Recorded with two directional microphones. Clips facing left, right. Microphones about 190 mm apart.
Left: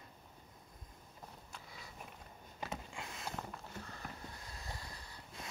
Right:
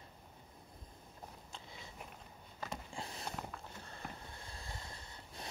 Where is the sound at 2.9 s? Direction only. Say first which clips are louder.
Right 1 dB; 35° right (ahead or behind).